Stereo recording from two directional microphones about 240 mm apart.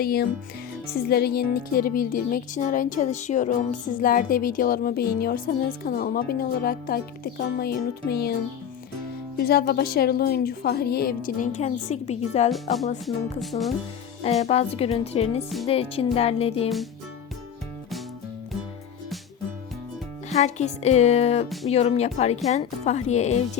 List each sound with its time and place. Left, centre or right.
0.0 s speech: left
9.4 s speech: left
13.4 s music: centre
14.2 s speech: left
20.3 s speech: left